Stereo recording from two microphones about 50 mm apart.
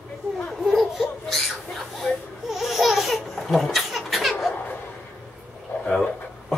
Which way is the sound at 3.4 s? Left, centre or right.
Centre.